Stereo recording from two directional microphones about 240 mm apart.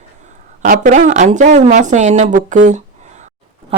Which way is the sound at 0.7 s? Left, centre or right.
Right.